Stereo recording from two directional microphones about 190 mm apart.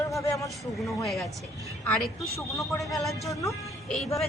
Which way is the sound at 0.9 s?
Centre (ahead or behind).